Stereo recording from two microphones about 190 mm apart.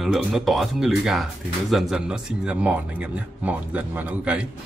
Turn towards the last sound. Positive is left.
turn(degrees=-5)  # may be behind; listen again after turning